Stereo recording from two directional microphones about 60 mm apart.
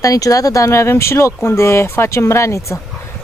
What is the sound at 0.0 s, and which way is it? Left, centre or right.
Speech, left.